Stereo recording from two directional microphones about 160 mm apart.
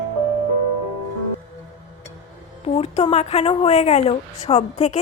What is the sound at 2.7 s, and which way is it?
Speech, 40° left (ahead or behind).